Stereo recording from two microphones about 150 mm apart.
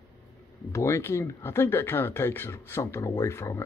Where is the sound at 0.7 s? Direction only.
15° left (ahead or behind).